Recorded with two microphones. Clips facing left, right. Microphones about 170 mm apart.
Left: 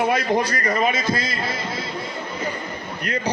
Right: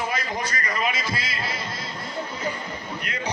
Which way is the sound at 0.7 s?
50° left (ahead or behind).